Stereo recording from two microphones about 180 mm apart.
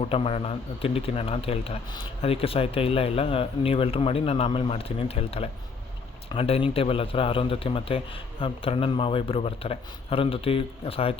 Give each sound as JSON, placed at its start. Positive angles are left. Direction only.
{"t": 0.1, "sound": "speech", "side_deg": 30}